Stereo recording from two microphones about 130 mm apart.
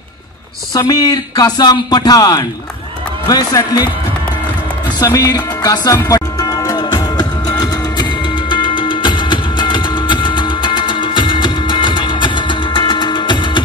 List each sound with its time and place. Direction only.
0.7 s speech: 30° left (ahead or behind)
4.9 s music: 30° left (ahead or behind)